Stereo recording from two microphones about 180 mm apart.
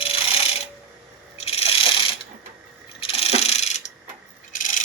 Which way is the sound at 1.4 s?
35° left (ahead or behind).